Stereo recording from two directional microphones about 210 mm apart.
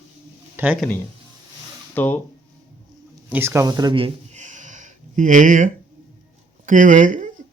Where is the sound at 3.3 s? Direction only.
10° right (ahead or behind); by 5.6 s 40° right (ahead or behind).